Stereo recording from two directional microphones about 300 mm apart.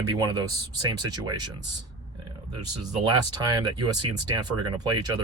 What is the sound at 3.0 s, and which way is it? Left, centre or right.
Speech, centre.